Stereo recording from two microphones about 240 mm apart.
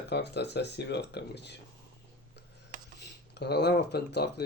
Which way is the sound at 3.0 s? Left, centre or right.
Left.